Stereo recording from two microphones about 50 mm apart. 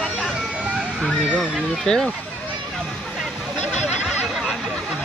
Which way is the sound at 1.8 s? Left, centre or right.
Centre.